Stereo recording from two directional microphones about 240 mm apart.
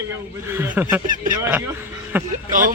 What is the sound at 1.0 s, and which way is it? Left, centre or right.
Speech, right.